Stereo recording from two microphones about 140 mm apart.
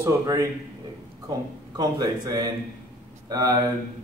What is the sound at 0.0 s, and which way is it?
Speech, 20° right (ahead or behind).